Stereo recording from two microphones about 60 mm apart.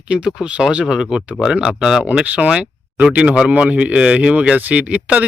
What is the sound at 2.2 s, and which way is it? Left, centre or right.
Speech, right.